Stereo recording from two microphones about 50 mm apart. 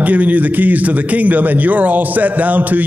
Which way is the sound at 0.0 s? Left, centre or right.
Right.